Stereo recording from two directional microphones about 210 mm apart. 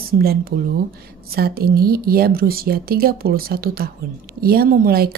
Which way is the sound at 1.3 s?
45° right (ahead or behind).